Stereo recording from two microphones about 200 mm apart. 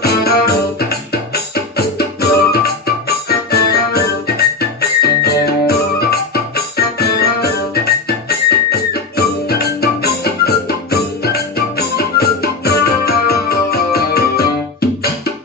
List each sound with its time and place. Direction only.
0.0 s music: 50° left (ahead or behind)